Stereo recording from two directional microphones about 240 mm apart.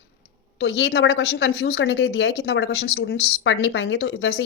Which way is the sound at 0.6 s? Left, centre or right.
Left.